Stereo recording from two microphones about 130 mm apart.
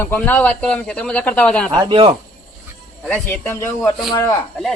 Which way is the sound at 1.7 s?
40° right (ahead or behind).